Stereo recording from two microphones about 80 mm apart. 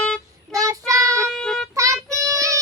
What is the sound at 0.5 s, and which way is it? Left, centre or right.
Child singing, right.